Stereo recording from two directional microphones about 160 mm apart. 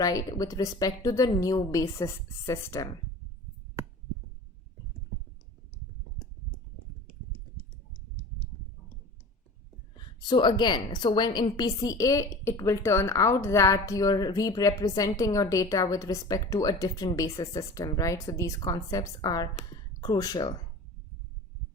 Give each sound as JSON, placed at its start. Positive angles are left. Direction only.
{"t": 0.0, "sound": "a woman's voice", "side_deg": 25}
{"t": 10.2, "sound": "a woman's voice", "side_deg": 30}